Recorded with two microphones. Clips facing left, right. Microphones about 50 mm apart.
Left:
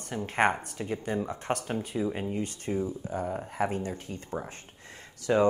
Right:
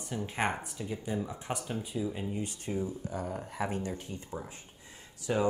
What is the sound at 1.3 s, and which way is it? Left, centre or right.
Speech, left.